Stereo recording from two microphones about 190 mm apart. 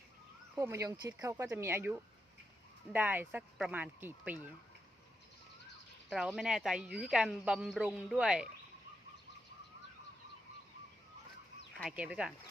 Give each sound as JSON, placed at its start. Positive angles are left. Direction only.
{"t": 0.5, "sound": "speech", "side_deg": -15}
{"t": 6.1, "sound": "speech", "side_deg": -5}
{"t": 11.7, "sound": "chicken", "side_deg": 5}
{"t": 11.9, "sound": "speech", "side_deg": -5}